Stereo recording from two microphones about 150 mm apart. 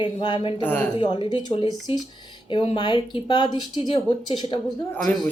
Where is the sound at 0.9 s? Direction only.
30° left (ahead or behind).